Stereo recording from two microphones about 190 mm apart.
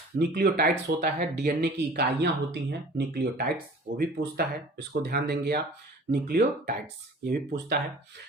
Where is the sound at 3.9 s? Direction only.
55° right (ahead or behind).